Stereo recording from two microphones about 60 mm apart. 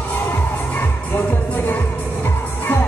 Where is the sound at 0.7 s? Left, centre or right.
Left.